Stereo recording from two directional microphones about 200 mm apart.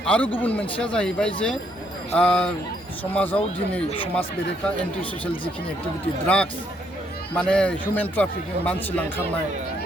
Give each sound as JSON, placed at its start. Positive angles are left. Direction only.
{"t": 0.0, "sound": "a man's voice", "side_deg": 5}
{"t": 3.8, "sound": "speech", "side_deg": 25}
{"t": 6.2, "sound": "a man's voice", "side_deg": 5}